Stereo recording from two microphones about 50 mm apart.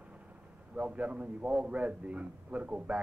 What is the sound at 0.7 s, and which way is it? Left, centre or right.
Speech, right.